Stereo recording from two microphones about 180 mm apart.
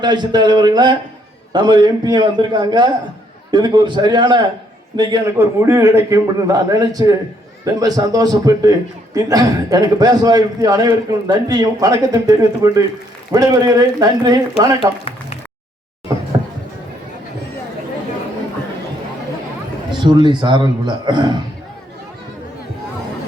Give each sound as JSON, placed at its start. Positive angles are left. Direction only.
{"t": 0.0, "sound": "a man's voice", "side_deg": -25}
{"t": 14.8, "sound": "speech", "side_deg": 30}
{"t": 19.9, "sound": "a man's voice", "side_deg": -25}